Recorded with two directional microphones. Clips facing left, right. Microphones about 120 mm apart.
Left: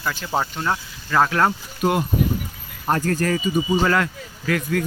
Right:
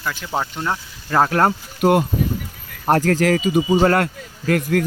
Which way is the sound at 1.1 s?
30° right (ahead or behind).